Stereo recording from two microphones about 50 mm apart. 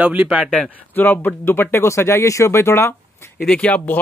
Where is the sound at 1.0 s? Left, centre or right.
Left.